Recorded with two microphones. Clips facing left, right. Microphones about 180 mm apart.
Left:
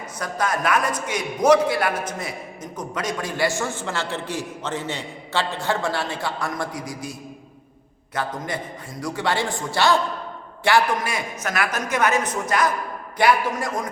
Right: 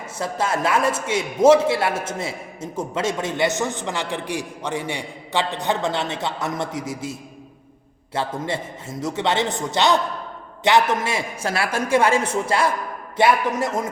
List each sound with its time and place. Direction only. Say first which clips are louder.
0.2 s a man's voice: right 2 dB; 25° right (ahead or behind)